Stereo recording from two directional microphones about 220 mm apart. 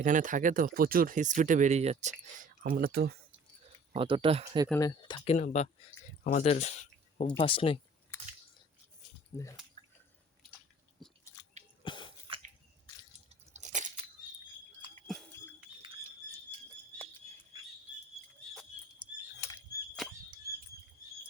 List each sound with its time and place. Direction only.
0.0 s speech: 35° right (ahead or behind)
3.9 s speech: 25° right (ahead or behind)
4.7 s speech: 15° left (ahead or behind)
8.1 s biting: 10° left (ahead or behind)
9.3 s speech: 15° left (ahead or behind)
9.8 s drip: 20° left (ahead or behind)
11.8 s a sound: 20° left (ahead or behind)
13.5 s crunch: 35° right (ahead or behind)
19.0 s rodents: 5° right (ahead or behind)
19.4 s a sound: 15° left (ahead or behind)
20.0 s a sound: centre (ahead or behind)